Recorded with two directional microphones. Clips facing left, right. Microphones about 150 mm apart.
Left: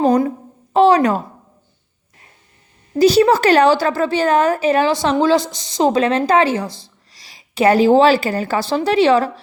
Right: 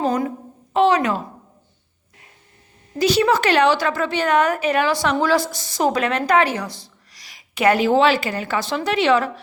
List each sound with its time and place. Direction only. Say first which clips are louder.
0.0 s a child's voice: left 6 dB; 35° left (ahead or behind)
3.0 s a woman's voice: left 6 dB; 35° left (ahead or behind)
6.7 s speech: left 3 dB; centre (ahead or behind)
7.1 s a woman's voice: left 2 dB; 30° left (ahead or behind)